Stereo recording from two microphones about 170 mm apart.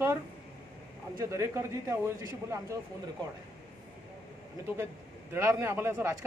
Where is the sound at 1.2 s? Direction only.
15° right (ahead or behind).